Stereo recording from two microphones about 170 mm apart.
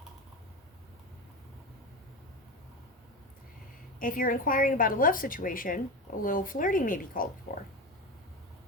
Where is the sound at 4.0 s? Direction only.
55° left (ahead or behind).